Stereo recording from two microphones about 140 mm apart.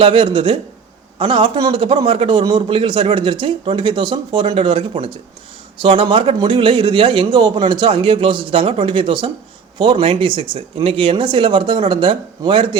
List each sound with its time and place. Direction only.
0.0 s a man's voice: 35° right (ahead or behind)